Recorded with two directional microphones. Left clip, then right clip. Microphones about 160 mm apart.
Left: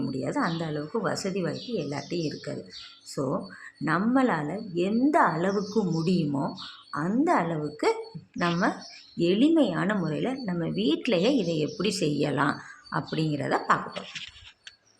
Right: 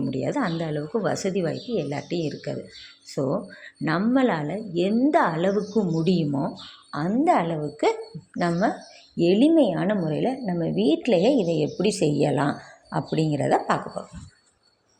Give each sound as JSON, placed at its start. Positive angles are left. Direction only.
{"t": 0.1, "sound": "speech", "side_deg": -25}